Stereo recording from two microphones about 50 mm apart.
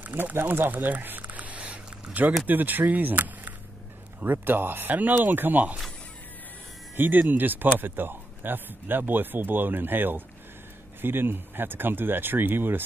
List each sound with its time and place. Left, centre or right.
0.0 s a sound: right
2.4 s speech: right
7.0 s speech: right